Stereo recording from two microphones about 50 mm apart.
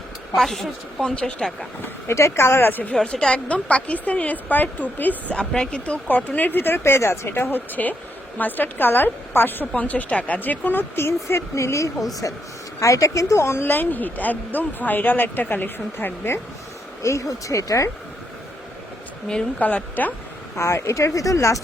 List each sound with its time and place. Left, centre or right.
0.3 s a woman's voice: centre
1.1 s speech: left
2.0 s speech: left
2.6 s speech: left
2.9 s speech: centre; by 5.1 s left
5.5 s speech: centre; by 7.5 s left
7.5 s speech: left
9.8 s speech: left
10.9 s speech: left
13.7 s speech: left
17.0 s speech: left
19.5 s speech: left
20.6 s speech: left